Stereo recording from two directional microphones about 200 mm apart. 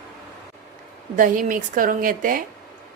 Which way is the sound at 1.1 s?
40° right (ahead or behind).